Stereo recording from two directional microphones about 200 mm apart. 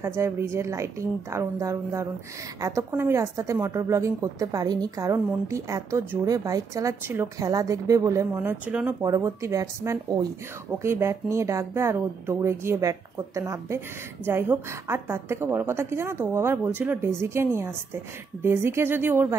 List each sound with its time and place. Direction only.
0.0 s a woman's voice: 15° right (ahead or behind)